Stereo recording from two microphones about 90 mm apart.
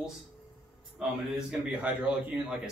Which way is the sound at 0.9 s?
5° right (ahead or behind).